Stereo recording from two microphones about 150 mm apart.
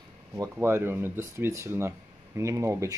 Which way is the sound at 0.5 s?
15° right (ahead or behind).